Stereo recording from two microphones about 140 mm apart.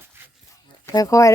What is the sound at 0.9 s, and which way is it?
Speech, 25° left (ahead or behind).